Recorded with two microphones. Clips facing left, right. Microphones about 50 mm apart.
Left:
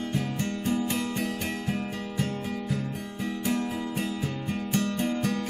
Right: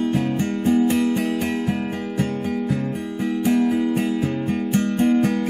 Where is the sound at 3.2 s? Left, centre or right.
Right.